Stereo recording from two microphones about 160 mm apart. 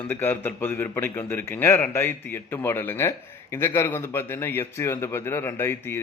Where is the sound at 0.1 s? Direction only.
15° left (ahead or behind).